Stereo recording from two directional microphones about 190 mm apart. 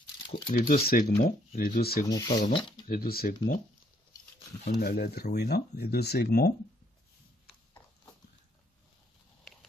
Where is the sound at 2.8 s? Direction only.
50° left (ahead or behind).